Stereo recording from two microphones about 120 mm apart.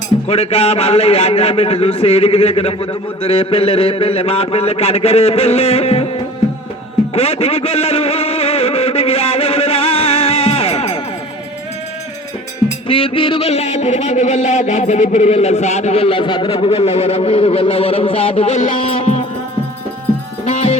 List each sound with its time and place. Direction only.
0.3 s a man's voice: 55° left (ahead or behind)
7.1 s a sound: 55° left (ahead or behind)
12.9 s a man's voice: 50° left (ahead or behind); by 18.7 s 70° left (ahead or behind)
18.7 s music: 50° left (ahead or behind)